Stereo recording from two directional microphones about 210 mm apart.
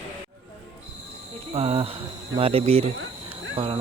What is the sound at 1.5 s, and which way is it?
Speech, 30° right (ahead or behind).